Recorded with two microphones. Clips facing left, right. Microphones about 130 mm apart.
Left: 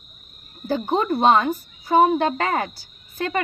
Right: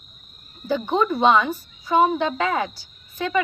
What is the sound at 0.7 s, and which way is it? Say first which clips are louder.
A woman's voice: even; 45° left (ahead or behind).